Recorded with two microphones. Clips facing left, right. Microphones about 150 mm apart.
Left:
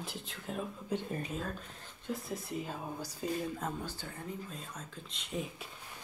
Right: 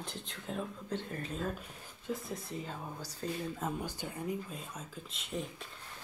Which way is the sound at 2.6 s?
10° left (ahead or behind).